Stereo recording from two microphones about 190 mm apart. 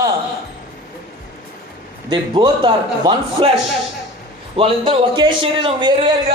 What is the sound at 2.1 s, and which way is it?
A man's voice, 25° right (ahead or behind).